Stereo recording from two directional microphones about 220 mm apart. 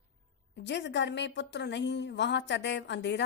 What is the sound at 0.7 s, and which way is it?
A woman's voice, 50° left (ahead or behind).